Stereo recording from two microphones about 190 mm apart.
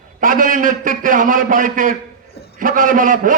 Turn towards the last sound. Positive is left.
turn(degrees=-45)  # may be behind; listen again after turning